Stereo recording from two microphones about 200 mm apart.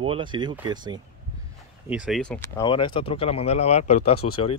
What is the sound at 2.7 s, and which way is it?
Speech, 25° left (ahead or behind).